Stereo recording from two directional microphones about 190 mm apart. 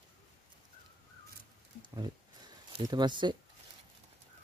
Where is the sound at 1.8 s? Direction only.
25° right (ahead or behind).